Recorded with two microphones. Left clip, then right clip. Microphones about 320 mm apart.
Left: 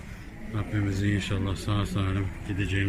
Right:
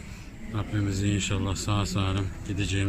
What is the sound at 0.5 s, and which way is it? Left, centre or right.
Speech, centre.